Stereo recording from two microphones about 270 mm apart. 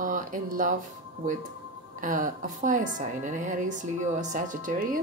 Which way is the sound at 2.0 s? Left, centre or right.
Right.